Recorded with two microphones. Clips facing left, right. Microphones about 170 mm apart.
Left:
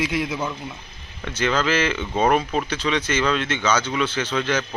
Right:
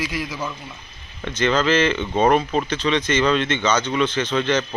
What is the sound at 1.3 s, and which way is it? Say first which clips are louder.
Speech: right 3 dB; 5° left (ahead or behind).